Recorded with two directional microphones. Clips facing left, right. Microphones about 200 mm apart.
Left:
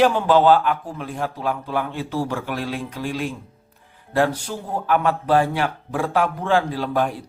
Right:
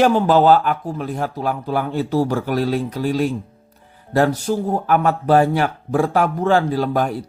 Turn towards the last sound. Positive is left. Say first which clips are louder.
# right 3 dB
turn(degrees=-40)  # may be behind; listen again after turning